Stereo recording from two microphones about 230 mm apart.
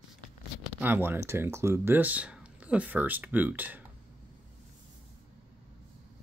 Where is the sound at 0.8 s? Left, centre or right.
Centre.